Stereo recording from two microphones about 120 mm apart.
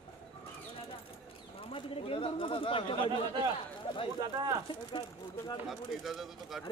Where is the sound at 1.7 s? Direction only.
50° left (ahead or behind).